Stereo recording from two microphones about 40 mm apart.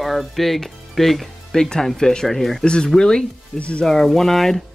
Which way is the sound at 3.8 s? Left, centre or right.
Centre.